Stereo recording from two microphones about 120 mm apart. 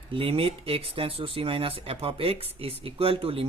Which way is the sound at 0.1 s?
50° right (ahead or behind).